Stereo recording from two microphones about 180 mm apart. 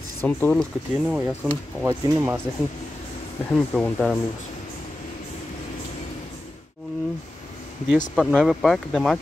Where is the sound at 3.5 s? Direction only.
5° left (ahead or behind).